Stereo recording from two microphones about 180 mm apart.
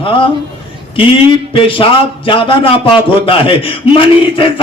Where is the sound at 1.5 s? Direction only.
30° left (ahead or behind).